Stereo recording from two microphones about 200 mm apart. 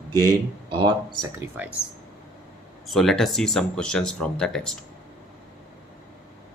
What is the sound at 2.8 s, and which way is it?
Speech, centre (ahead or behind).